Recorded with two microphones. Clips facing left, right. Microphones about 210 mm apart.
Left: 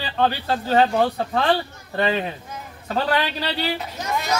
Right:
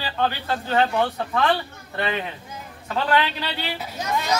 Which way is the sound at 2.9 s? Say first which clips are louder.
Even; 40° left (ahead or behind).